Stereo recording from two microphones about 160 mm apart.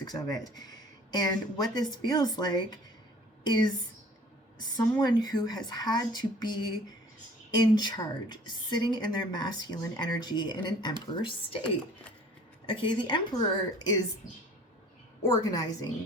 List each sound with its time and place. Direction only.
0.0 s a woman's voice: 25° left (ahead or behind)
12.6 s speech: 30° left (ahead or behind)
15.2 s a woman's voice: 25° left (ahead or behind)